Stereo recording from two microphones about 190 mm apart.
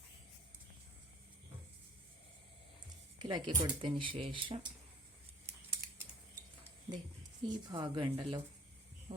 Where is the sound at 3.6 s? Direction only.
25° right (ahead or behind).